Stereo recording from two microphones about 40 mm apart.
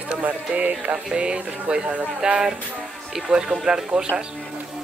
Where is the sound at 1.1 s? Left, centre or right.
Right.